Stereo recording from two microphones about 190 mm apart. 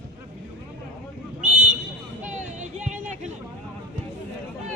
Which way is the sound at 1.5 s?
40° right (ahead or behind).